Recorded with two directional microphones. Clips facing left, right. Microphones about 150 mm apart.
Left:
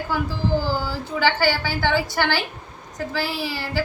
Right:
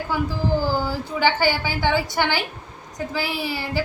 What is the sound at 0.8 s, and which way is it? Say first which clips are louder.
A woman's voice: right 1 dB; 15° right (ahead or behind).